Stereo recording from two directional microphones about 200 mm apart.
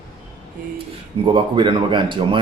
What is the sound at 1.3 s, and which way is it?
A man's voice, 25° right (ahead or behind).